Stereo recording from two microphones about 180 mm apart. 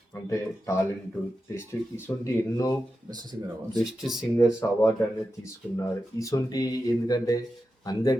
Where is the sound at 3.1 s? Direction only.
25° right (ahead or behind).